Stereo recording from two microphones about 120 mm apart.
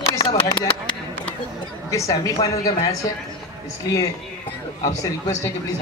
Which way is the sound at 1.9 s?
30° left (ahead or behind).